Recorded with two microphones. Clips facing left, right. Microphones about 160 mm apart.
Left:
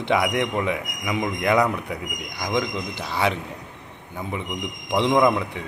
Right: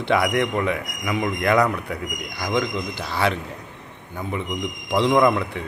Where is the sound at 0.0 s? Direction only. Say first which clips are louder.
Right 1 dB; 15° left (ahead or behind).